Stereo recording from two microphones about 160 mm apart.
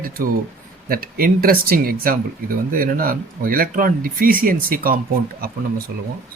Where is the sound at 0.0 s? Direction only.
65° right (ahead or behind).